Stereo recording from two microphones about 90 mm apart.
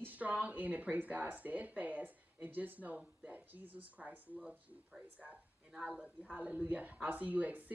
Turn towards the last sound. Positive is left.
turn(degrees=-15)  # may be behind; listen again after turning